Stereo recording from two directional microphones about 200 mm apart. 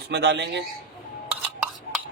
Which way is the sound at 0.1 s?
60° right (ahead or behind).